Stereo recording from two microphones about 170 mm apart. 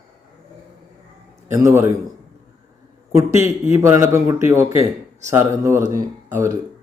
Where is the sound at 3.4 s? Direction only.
15° right (ahead or behind).